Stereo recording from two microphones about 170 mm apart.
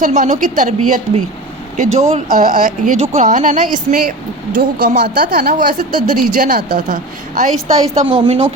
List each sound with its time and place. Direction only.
0.0 s a woman's voice: 45° right (ahead or behind)
8.1 s speech: 35° right (ahead or behind)